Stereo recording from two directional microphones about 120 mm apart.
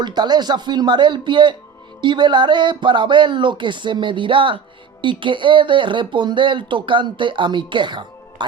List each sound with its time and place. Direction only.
0.0 s speech: 35° right (ahead or behind)